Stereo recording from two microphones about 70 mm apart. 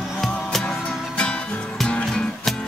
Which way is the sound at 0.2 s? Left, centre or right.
Centre.